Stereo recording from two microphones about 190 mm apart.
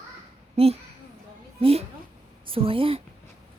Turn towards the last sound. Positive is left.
turn(degrees=-30)  # may be behind; listen again after turning